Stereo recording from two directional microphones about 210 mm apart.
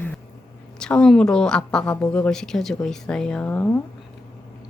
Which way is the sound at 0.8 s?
5° left (ahead or behind).